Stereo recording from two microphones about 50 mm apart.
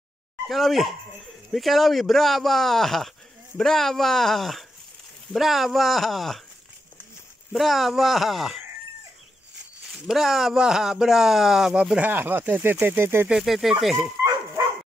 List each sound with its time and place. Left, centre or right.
0.5 s speech: centre
7.5 s speech: centre
9.8 s speech: centre
11.7 s speech: right
12.0 s speech: right
12.8 s speech: right
13.4 s speech: centre